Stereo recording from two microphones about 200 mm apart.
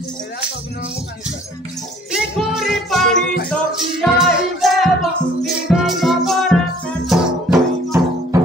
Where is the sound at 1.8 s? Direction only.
Centre (ahead or behind).